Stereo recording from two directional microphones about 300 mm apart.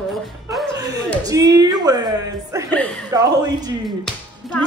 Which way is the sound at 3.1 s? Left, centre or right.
Centre.